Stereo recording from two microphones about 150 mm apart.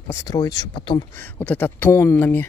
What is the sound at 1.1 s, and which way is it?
Speech, 15° left (ahead or behind).